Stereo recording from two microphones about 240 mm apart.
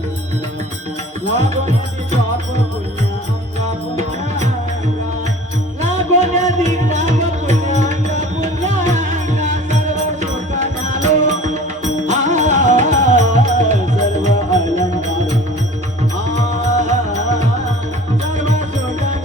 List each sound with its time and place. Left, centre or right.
1.4 s music: right
6.1 s music: right
18.3 s music: right